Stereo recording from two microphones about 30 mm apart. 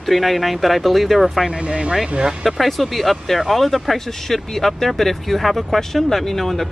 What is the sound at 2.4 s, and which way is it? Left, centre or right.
Speech, centre.